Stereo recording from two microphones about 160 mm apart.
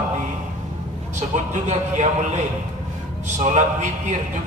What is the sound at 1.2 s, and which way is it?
Speech, 50° right (ahead or behind).